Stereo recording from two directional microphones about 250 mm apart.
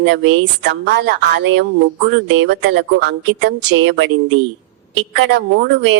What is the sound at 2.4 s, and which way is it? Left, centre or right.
Speech, right.